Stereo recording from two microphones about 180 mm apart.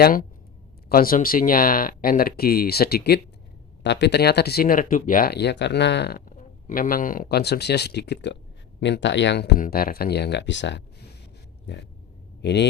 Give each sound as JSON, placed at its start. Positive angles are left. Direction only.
{"t": 0.0, "sound": "speech", "side_deg": 50}
{"t": 3.8, "sound": "speech", "side_deg": 70}
{"t": 8.8, "sound": "speech", "side_deg": 80}
{"t": 9.6, "sound": "speech", "side_deg": 55}
{"t": 11.6, "sound": "a sound", "side_deg": 70}
{"t": 12.4, "sound": "a man's voice", "side_deg": 70}